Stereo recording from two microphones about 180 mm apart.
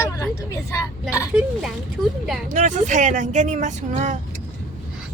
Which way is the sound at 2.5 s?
45° right (ahead or behind).